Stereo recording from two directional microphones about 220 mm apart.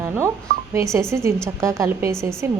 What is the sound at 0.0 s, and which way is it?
Telephone dialing, 10° right (ahead or behind).